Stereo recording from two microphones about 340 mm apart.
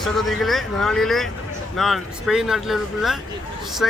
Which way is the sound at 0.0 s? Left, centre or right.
Centre.